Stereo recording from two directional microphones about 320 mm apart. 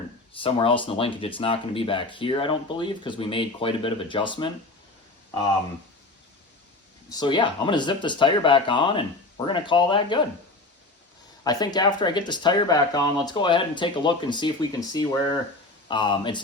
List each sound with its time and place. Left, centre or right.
0.3 s speech: centre
7.1 s speech: centre
11.4 s speech: centre